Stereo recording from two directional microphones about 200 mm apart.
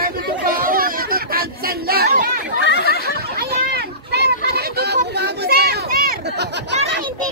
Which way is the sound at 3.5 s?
55° right (ahead or behind).